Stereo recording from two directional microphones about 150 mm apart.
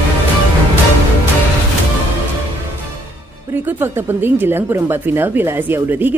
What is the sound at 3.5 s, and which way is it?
Speech, 15° right (ahead or behind).